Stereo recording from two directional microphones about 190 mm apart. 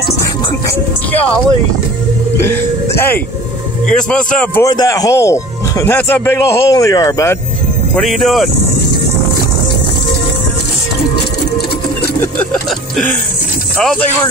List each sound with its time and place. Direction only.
0.7 s speech: 10° left (ahead or behind)
2.4 s a man's voice: 10° left (ahead or behind)
4.6 s speech: 20° left (ahead or behind)
7.9 s a man's voice: centre (ahead or behind)